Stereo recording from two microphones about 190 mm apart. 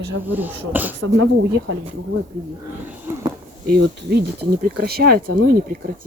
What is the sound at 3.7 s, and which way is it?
Speech, 60° right (ahead or behind).